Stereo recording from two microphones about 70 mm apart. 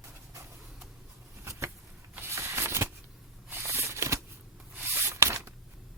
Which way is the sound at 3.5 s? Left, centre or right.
Right.